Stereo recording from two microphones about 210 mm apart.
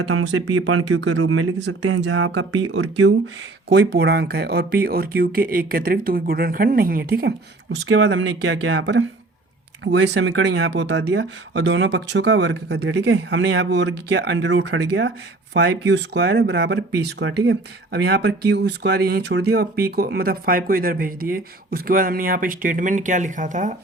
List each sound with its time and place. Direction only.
0.1 s speech: 90° right
3.0 s speech: 60° right (ahead or behind); by 23.7 s 35° right (ahead or behind)